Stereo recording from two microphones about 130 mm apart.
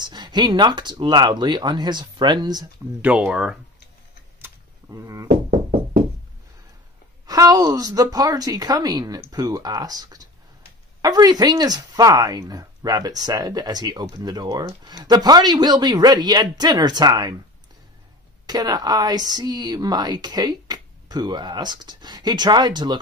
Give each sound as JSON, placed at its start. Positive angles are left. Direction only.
{"t": 0.0, "sound": "speech", "side_deg": -35}
{"t": 3.0, "sound": "speech", "side_deg": -10}
{"t": 4.4, "sound": "a sound", "side_deg": -25}
{"t": 7.2, "sound": "a woman's voice", "side_deg": -30}
{"t": 18.5, "sound": "speech", "side_deg": -30}